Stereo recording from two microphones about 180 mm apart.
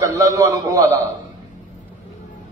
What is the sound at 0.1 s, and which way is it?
Speech, 20° right (ahead or behind).